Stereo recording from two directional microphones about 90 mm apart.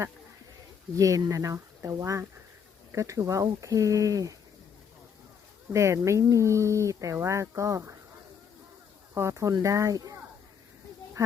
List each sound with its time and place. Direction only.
0.9 s speech: 40° right (ahead or behind)
5.7 s speech: 35° right (ahead or behind)
9.3 s speech: 40° right (ahead or behind)